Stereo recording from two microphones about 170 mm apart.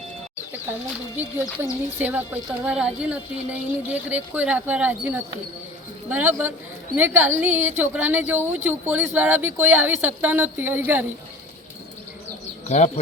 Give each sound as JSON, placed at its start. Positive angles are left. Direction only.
{"t": 1.1, "sound": "speech", "side_deg": -10}
{"t": 12.6, "sound": "speech", "side_deg": 45}